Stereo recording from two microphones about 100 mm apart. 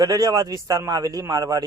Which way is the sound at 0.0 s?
35° right (ahead or behind).